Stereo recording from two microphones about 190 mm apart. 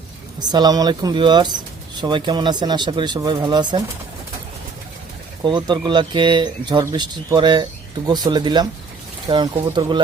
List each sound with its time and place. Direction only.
0.3 s speech: 20° right (ahead or behind)
5.4 s speech: 25° right (ahead or behind)